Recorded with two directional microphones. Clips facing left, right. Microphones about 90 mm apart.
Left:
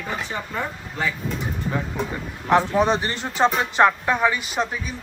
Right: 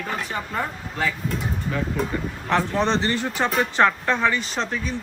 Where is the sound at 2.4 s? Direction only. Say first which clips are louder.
Left 4 dB; 10° left (ahead or behind).